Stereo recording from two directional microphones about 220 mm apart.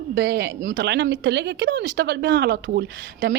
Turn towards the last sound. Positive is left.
turn(degrees=-50)  # may be behind; listen again after turning